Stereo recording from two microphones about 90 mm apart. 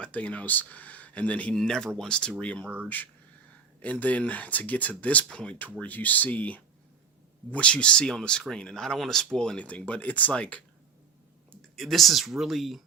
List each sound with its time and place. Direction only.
0.0 s speech: 15° left (ahead or behind)
2.6 s speech: 15° right (ahead or behind)
3.8 s speech: 15° left (ahead or behind)
11.8 s speech: centre (ahead or behind)